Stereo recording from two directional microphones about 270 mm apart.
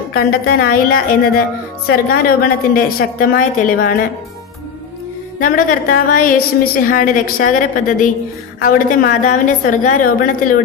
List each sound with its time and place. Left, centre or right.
0.1 s a woman's voice: left
5.4 s a woman's voice: left